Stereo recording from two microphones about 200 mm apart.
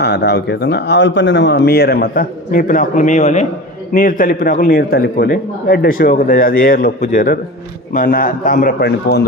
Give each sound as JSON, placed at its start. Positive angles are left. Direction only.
{"t": 0.0, "sound": "a man's voice", "side_deg": 55}